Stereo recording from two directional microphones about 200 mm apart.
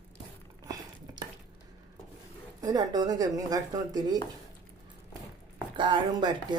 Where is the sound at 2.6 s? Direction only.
20° right (ahead or behind).